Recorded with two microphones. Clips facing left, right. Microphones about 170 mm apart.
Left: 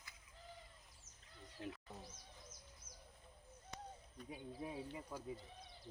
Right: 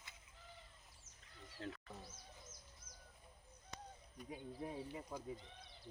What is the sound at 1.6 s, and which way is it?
Bird, 15° left (ahead or behind).